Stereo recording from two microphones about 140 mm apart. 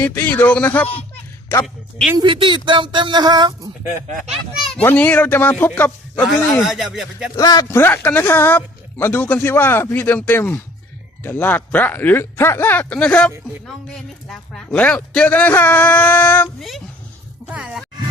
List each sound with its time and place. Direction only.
0.0 s speech: 15° left (ahead or behind)
0.9 s a sound: 10° left (ahead or behind)
1.6 s speech: centre (ahead or behind)
2.1 s speech: 35° right (ahead or behind)
4.3 s a child's voice: centre (ahead or behind)
4.8 s speech: 10° left (ahead or behind)
6.2 s speech: centre (ahead or behind)
7.3 s speech: 25° left (ahead or behind)
16.6 s speech: centre (ahead or behind)